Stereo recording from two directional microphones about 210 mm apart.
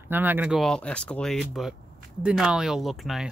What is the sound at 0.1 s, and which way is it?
Speech, 10° right (ahead or behind).